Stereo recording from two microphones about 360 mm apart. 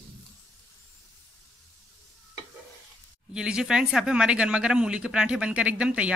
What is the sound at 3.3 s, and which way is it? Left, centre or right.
Speech, centre.